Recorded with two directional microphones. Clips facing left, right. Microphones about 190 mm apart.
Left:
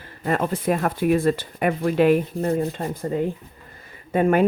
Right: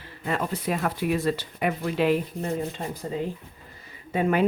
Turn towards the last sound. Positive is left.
turn(degrees=50)  # may be behind; listen again after turning